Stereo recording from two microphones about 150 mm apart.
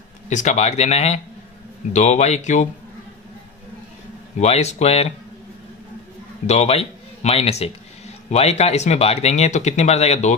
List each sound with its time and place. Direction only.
0.3 s speech: 50° left (ahead or behind)
4.4 s speech: 45° left (ahead or behind)
6.4 s a man's voice: 45° left (ahead or behind)